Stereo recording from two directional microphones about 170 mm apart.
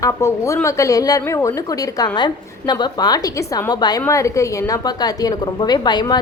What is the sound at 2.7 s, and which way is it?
A woman's voice, 25° left (ahead or behind).